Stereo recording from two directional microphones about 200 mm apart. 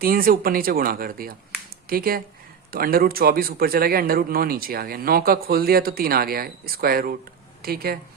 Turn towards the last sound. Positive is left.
turn(degrees=-50)  # may be behind; listen again after turning